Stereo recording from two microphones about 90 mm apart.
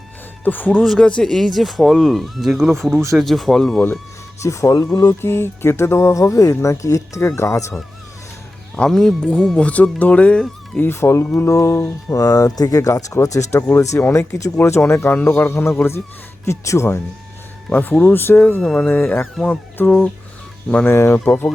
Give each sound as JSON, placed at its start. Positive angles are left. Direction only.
{"t": 0.4, "sound": "speech", "side_deg": 20}
{"t": 0.8, "sound": "speech", "side_deg": 5}
{"t": 4.4, "sound": "speech", "side_deg": 35}
{"t": 8.7, "sound": "speech", "side_deg": 5}
{"t": 9.6, "sound": "speech", "side_deg": 15}
{"t": 10.8, "sound": "speech", "side_deg": 25}
{"t": 17.7, "sound": "speech", "side_deg": 20}
{"t": 18.6, "sound": "speech", "side_deg": 5}
{"t": 18.9, "sound": "speech", "side_deg": 20}